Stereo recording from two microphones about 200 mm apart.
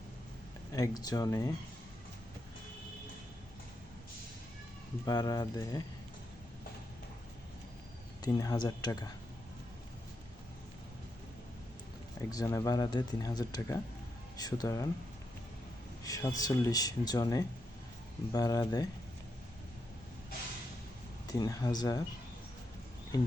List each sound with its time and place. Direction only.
0.7 s speech: 20° left (ahead or behind)
5.0 s speech: 20° left (ahead or behind)
8.2 s speech: 20° left (ahead or behind)
12.3 s speech: 15° left (ahead or behind)
16.0 s speech: 20° left (ahead or behind)
21.2 s speech: 20° left (ahead or behind)